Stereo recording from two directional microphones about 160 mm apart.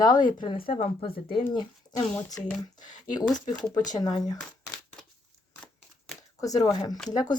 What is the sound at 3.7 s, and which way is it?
Speech, 25° left (ahead or behind).